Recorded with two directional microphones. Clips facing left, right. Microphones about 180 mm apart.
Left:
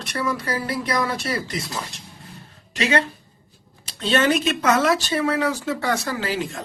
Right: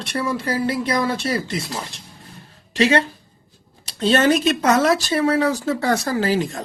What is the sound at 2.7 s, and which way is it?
A woman's voice, 35° right (ahead or behind).